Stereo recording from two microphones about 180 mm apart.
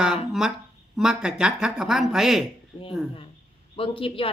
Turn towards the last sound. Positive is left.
turn(degrees=30)  # may be behind; listen again after turning